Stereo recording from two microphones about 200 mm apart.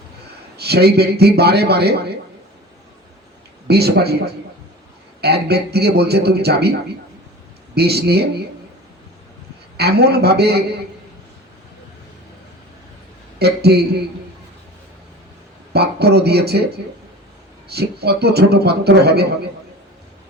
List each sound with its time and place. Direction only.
0.5 s a man's voice: 55° right (ahead or behind)
3.7 s a man's voice: 55° right (ahead or behind)
5.2 s a man's voice: 55° right (ahead or behind)
7.8 s a man's voice: 55° right (ahead or behind)
9.7 s a man's voice: 55° right (ahead or behind)
13.4 s a man's voice: 55° right (ahead or behind)
15.7 s a man's voice: 55° right (ahead or behind)